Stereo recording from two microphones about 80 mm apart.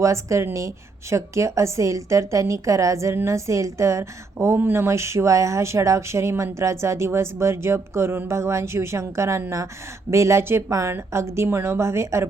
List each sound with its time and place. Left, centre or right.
0.0 s a woman's voice: right